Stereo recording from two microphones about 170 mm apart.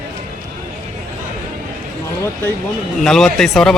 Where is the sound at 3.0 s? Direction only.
5° left (ahead or behind).